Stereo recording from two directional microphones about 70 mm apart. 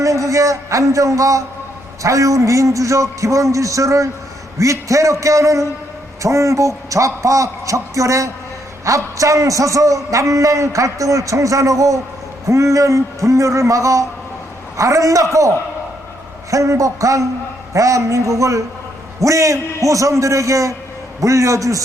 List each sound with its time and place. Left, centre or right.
0.0 s a man's voice: right